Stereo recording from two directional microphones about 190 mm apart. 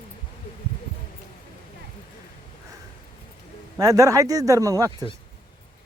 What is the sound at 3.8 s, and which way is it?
Speech, 20° right (ahead or behind).